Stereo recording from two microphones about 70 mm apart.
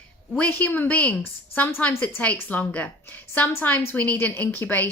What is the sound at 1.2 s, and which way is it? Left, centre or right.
Speech, left.